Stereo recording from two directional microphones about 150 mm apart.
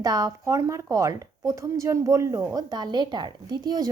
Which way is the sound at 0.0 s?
25° right (ahead or behind).